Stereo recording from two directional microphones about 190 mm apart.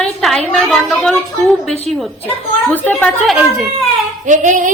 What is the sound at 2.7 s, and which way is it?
Speech, 10° left (ahead or behind).